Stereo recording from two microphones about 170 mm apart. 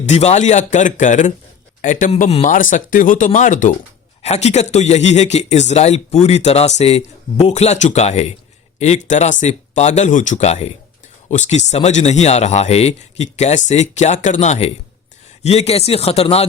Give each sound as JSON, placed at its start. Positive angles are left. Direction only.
{"t": 0.0, "sound": "speech", "side_deg": 40}